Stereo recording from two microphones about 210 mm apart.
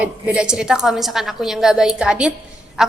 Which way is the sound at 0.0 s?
5° right (ahead or behind).